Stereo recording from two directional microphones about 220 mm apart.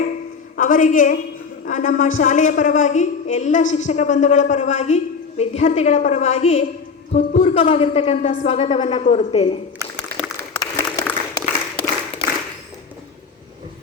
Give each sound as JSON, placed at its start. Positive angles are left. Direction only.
{"t": 0.5, "sound": "a woman's voice", "side_deg": 35}
{"t": 10.1, "sound": "a sound", "side_deg": -45}
{"t": 10.6, "sound": "applause", "side_deg": 20}